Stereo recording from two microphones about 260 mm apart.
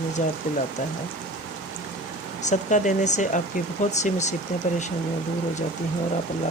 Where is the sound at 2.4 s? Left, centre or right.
Left.